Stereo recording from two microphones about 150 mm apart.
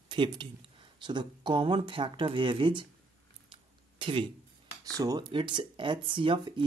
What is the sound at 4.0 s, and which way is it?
Speech, 35° right (ahead or behind).